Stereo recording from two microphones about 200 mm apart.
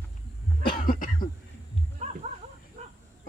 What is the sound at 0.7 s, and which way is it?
Cough, 45° left (ahead or behind).